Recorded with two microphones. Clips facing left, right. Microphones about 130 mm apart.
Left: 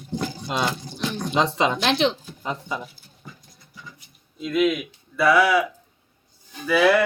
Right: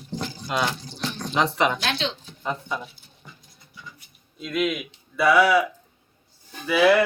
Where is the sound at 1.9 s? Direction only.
80° left.